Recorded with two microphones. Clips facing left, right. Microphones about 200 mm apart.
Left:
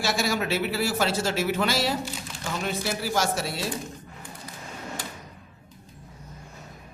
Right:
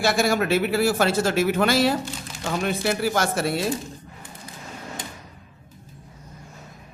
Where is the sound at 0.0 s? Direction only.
55° right (ahead or behind).